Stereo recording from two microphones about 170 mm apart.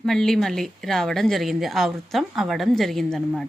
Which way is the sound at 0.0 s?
Centre (ahead or behind).